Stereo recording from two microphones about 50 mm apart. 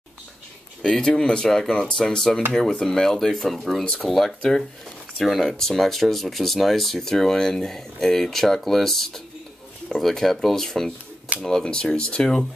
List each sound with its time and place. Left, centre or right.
0.8 s speech: centre
5.1 s speech: centre
11.3 s speech: right
11.6 s speech: centre